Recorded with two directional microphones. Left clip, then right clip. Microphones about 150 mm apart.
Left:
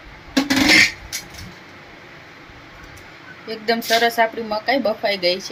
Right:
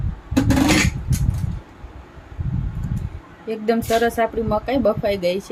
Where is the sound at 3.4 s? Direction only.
85° right.